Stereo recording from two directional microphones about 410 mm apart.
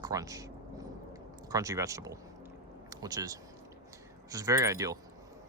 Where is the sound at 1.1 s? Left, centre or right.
Centre.